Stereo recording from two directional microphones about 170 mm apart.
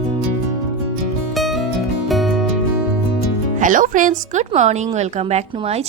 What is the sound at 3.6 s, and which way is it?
A woman's voice, 50° right (ahead or behind).